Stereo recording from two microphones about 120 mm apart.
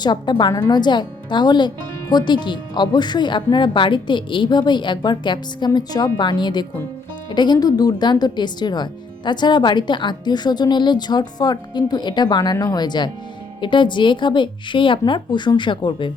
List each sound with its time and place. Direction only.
0.0 s speech: 40° left (ahead or behind)